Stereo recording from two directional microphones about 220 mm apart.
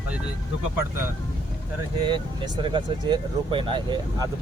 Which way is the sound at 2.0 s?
20° right (ahead or behind).